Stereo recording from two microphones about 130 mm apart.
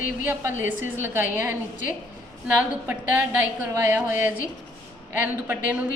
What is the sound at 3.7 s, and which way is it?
Speech, 20° right (ahead or behind).